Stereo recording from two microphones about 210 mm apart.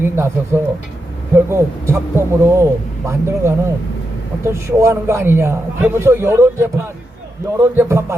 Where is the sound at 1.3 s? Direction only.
10° right (ahead or behind).